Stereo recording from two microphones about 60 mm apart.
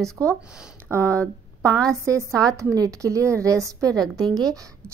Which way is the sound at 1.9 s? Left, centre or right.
Right.